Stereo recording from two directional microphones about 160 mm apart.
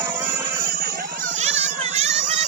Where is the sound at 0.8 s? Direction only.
70° right (ahead or behind); by 2.4 s 40° right (ahead or behind).